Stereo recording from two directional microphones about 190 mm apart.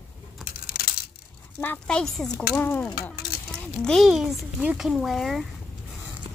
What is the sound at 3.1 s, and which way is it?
Chink, 55° left (ahead or behind).